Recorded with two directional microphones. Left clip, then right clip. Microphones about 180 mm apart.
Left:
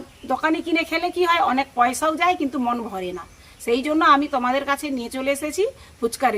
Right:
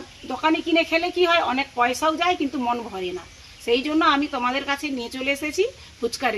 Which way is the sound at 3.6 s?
15° left (ahead or behind).